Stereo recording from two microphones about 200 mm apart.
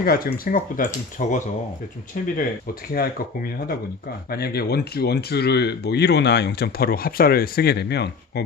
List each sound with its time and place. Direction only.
0.0 s speech: 50° left (ahead or behind)